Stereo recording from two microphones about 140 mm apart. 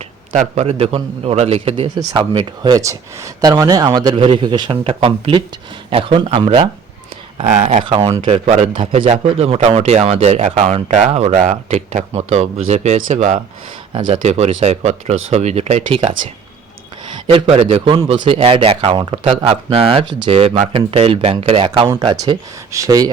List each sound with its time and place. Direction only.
0.3 s speech: 50° right (ahead or behind)
2.6 s a man's voice: 25° right (ahead or behind); by 6.7 s 45° right (ahead or behind)
7.4 s speech: 60° right (ahead or behind)
8.7 s a man's voice: 35° right (ahead or behind)
9.0 s speech: 50° right (ahead or behind)
14.1 s speech: 50° right (ahead or behind)
17.3 s speech: 45° right (ahead or behind)
22.0 s a man's voice: 30° right (ahead or behind)